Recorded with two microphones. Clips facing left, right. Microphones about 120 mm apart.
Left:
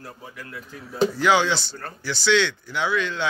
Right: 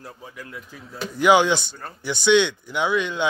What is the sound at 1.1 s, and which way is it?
Speech, 15° right (ahead or behind).